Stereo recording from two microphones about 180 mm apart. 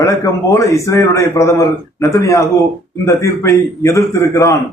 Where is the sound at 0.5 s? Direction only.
15° left (ahead or behind).